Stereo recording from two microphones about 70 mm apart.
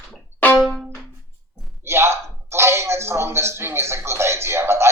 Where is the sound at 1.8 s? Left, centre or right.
Right.